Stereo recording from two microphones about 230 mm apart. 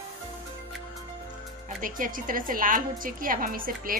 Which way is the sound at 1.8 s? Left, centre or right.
Right.